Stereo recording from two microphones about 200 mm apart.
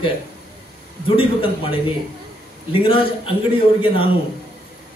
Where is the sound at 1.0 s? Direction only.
25° left (ahead or behind).